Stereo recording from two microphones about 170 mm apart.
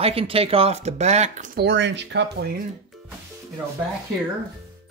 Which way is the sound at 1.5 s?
90° right.